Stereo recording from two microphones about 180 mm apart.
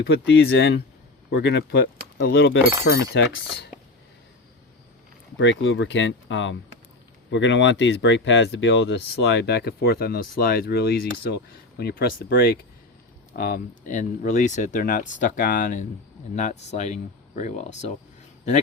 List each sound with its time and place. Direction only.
0.1 s speech: 70° left (ahead or behind)
5.4 s speech: 90° left; by 17.9 s 40° left (ahead or behind)